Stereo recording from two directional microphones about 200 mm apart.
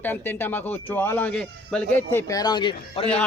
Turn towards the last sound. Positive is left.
turn(degrees=25)  # may be behind; listen again after turning